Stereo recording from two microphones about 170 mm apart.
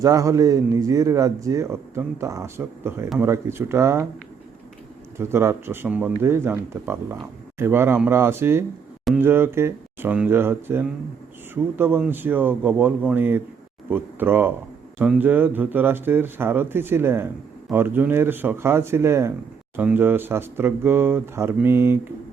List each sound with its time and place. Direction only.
0.0 s speech: 20° right (ahead or behind)
5.1 s speech: 15° right (ahead or behind)